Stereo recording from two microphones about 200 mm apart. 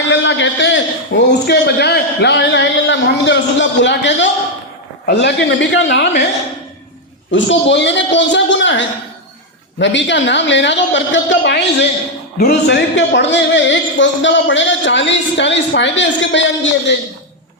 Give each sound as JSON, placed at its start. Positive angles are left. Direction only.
{"t": 0.1, "sound": "a man's voice", "side_deg": 65}
{"t": 7.3, "sound": "a man's voice", "side_deg": 65}